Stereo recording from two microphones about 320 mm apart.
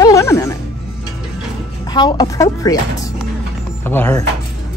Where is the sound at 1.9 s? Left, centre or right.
Centre.